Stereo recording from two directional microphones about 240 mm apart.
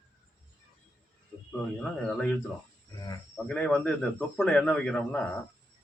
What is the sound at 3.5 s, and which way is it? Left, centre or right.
A man's voice, centre.